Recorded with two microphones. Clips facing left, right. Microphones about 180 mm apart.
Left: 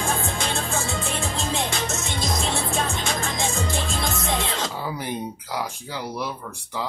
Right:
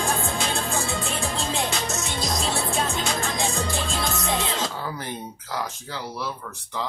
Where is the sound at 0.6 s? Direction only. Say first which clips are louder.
Even; 20° left (ahead or behind).